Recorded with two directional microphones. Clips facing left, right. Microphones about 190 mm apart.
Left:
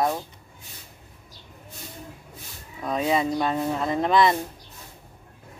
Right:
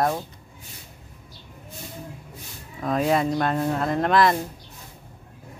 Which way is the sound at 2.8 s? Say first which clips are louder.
Right 2 dB; centre (ahead or behind).